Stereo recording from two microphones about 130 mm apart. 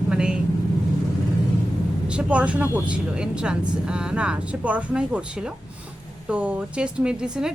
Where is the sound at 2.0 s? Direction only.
10° right (ahead or behind).